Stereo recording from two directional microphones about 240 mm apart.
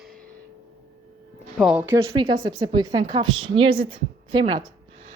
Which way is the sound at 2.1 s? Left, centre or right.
Right.